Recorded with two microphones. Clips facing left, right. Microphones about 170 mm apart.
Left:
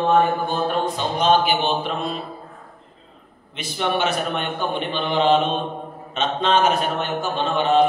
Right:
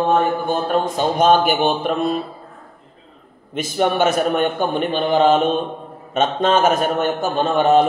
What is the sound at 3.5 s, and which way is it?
A man's voice, 45° right (ahead or behind).